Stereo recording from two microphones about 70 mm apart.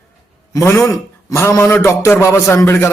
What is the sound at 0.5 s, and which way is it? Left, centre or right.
A man's voice, left.